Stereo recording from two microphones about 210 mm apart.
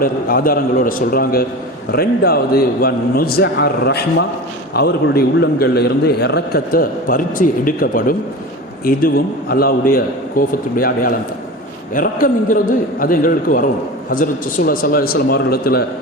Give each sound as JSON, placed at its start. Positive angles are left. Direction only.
{"t": 0.0, "sound": "a man's voice", "side_deg": 45}